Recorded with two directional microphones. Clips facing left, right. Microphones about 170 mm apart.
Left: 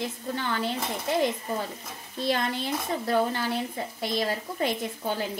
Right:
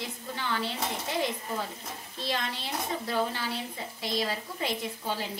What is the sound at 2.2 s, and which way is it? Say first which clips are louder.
Speech: left 6 dB; 55° left (ahead or behind).